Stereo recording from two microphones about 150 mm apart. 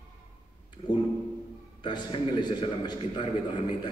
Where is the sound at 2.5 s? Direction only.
30° left (ahead or behind).